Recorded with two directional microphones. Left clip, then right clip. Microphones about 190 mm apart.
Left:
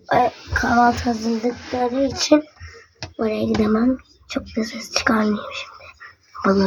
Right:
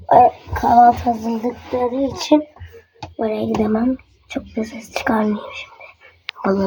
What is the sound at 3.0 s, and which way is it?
Speech, 10° left (ahead or behind).